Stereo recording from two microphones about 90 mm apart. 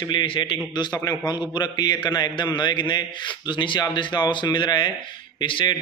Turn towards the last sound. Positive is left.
turn(degrees=70)  # may be behind; listen again after turning